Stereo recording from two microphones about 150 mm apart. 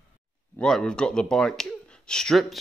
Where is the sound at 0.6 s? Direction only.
5° left (ahead or behind).